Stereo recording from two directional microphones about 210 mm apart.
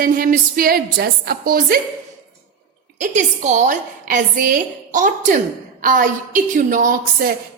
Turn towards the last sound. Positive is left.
turn(degrees=-45)  # may be behind; listen again after turning